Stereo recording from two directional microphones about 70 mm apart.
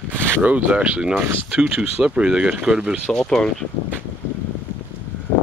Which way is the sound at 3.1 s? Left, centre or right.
Centre.